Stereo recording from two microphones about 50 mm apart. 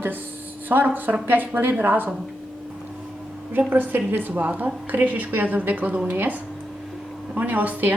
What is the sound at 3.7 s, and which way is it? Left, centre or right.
A woman's voice, right.